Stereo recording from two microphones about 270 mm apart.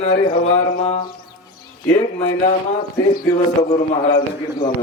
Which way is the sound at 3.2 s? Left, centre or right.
Left.